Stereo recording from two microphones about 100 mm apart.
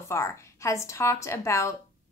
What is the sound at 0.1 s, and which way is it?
A woman's voice, 30° left (ahead or behind).